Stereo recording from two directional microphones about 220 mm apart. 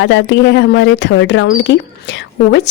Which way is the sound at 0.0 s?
55° left (ahead or behind).